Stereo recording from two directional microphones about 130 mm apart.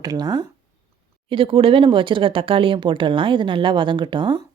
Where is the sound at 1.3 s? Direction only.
45° right (ahead or behind).